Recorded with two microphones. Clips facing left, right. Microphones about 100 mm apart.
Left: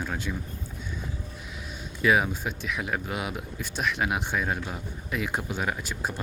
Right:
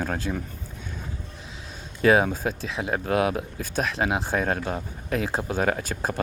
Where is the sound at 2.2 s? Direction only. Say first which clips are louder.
Right 4 dB; 40° right (ahead or behind).